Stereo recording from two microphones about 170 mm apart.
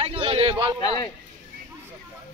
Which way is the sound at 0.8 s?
25° left (ahead or behind).